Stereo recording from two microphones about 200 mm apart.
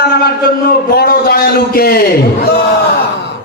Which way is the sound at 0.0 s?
50° left (ahead or behind).